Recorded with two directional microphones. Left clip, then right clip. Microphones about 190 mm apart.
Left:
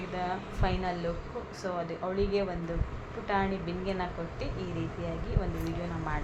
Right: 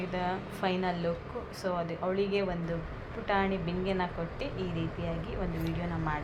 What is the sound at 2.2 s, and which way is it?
A woman's voice, 25° right (ahead or behind).